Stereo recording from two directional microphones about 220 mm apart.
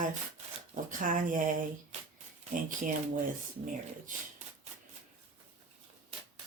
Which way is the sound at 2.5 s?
35° right (ahead or behind).